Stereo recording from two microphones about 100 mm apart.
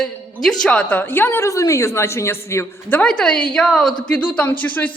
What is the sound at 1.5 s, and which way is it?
A man's voice, 30° left (ahead or behind).